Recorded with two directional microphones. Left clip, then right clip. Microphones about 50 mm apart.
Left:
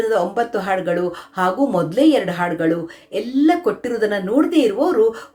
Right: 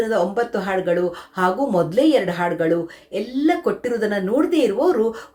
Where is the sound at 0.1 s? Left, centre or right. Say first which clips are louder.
Left 1 dB; left.